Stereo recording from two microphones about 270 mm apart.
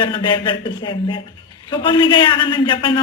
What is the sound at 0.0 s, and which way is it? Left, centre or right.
A man's voice, centre.